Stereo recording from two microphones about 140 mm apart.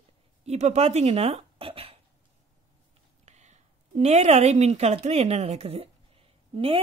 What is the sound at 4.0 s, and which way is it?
A woman's voice, 50° right (ahead or behind).